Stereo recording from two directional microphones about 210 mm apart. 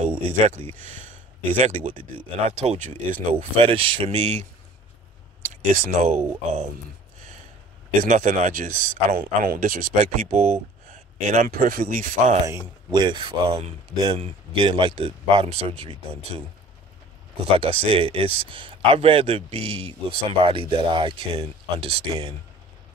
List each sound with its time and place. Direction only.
0.7 s speech: 35° right (ahead or behind)
5.5 s speech: 35° right (ahead or behind)
8.0 s speech: 40° right (ahead or behind)
12.9 s speech: 20° right (ahead or behind)
17.5 s speech: 25° right (ahead or behind)